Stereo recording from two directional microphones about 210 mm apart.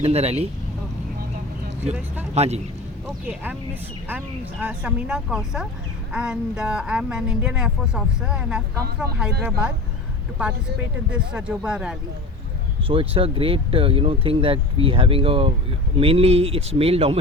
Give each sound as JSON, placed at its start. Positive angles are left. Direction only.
{"t": 0.0, "sound": "speech", "side_deg": -30}
{"t": 2.3, "sound": "speech", "side_deg": -30}
{"t": 3.2, "sound": "speech", "side_deg": -10}
{"t": 4.6, "sound": "speech", "side_deg": -5}
{"t": 12.9, "sound": "speech", "side_deg": -25}